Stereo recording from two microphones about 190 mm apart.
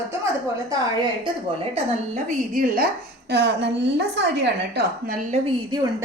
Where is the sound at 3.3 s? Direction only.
60° right (ahead or behind).